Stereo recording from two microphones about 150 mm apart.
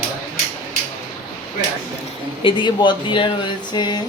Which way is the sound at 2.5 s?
30° left (ahead or behind).